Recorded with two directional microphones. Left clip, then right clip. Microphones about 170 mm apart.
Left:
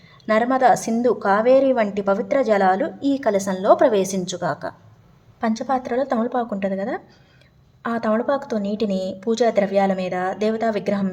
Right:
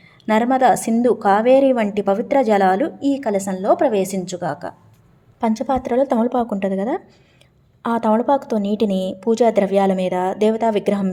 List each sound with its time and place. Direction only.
0.3 s a woman's voice: 15° right (ahead or behind)
5.4 s speech: 25° right (ahead or behind)